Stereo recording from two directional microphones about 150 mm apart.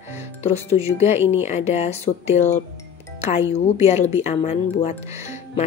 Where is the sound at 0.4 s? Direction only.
45° left (ahead or behind).